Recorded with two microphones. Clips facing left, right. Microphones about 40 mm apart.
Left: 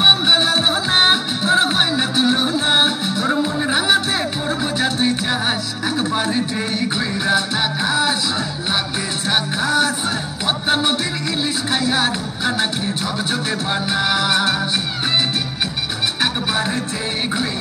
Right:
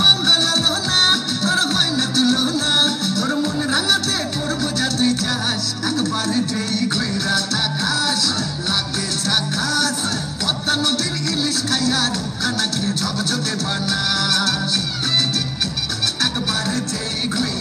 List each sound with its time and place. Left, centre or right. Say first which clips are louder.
0.0 s music: left 2 dB; left
9.3 s music: left 3 dB; left